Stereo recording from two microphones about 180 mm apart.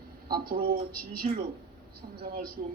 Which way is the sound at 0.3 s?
55° right (ahead or behind).